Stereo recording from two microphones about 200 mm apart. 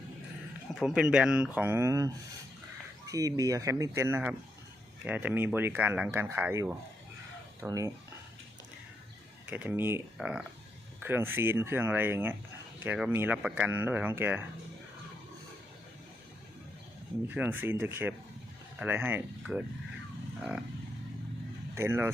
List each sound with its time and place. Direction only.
0.8 s speech: 5° right (ahead or behind)
9.5 s speech: 10° right (ahead or behind)
17.2 s speech: 10° right (ahead or behind)
21.8 s speech: 10° right (ahead or behind)